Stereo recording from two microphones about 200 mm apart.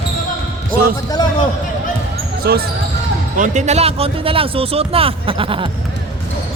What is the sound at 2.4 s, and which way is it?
Speech, 50° right (ahead or behind).